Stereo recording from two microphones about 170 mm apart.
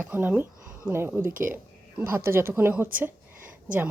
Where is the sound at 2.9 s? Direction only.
10° right (ahead or behind).